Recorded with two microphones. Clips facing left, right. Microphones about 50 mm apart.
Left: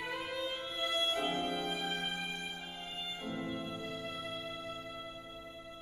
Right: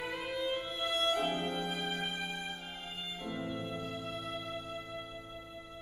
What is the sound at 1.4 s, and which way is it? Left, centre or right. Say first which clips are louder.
Music: even; centre.